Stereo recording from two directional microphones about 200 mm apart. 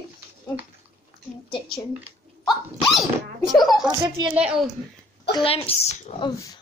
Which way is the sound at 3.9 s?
20° right (ahead or behind).